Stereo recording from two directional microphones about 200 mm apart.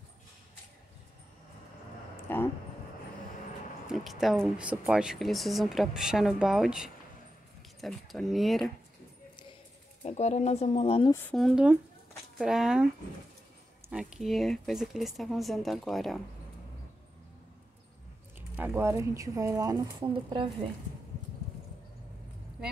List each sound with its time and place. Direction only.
2.1 s a sound: 10° left (ahead or behind)
3.9 s speech: centre (ahead or behind)
10.0 s speech: 35° left (ahead or behind)
11.1 s speech: 10° left (ahead or behind)
11.3 s speech: centre (ahead or behind)
13.8 s speech: 5° right (ahead or behind)
18.6 s speech: 10° right (ahead or behind)